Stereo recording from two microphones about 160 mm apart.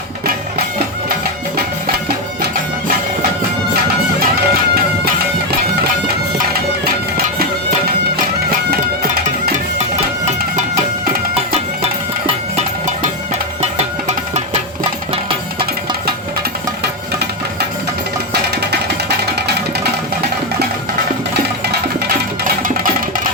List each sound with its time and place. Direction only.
4.4 s music: 70° right (ahead or behind)
7.3 s music: 70° right (ahead or behind)
9.2 s music: 50° right (ahead or behind)
11.3 s music: 40° right (ahead or behind)
15.1 s music: 35° right (ahead or behind)
16.8 s music: 90° right
22.8 s music: 60° right (ahead or behind)